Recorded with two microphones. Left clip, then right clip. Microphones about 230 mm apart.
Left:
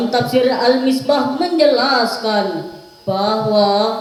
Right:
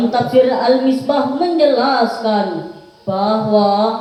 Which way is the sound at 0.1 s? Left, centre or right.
Left.